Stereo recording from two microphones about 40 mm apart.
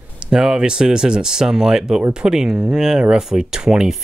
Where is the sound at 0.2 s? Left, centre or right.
Centre.